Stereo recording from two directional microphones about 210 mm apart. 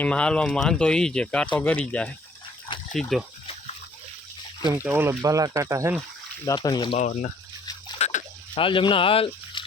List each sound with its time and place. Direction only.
0.0 s speech: 5° left (ahead or behind)
4.7 s speech: 10° right (ahead or behind)
6.4 s speech: 20° left (ahead or behind)
7.0 s speech: 35° left (ahead or behind)
7.6 s splash: 20° left (ahead or behind)
7.9 s a sound: 30° left (ahead or behind)